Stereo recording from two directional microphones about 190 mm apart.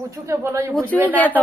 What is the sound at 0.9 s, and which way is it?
Speech, 5° left (ahead or behind).